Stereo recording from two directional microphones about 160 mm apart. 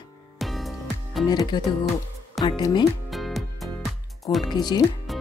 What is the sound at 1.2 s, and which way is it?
Speech, 25° left (ahead or behind).